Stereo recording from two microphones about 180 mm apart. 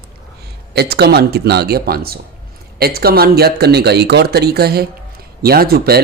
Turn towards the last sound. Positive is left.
turn(degrees=-60)  # may be behind; listen again after turning